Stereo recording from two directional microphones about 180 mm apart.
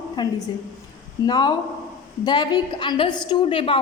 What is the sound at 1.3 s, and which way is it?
A woman's voice, 25° left (ahead or behind).